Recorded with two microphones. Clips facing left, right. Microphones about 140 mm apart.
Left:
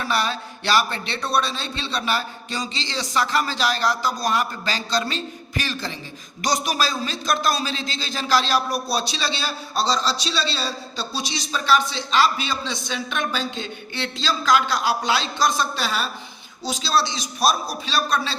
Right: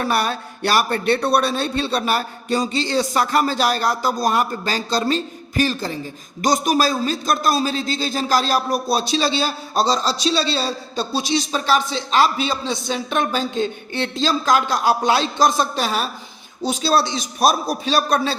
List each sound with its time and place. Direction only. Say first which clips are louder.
0.0 s a man's voice: right 3 dB; 50° right (ahead or behind)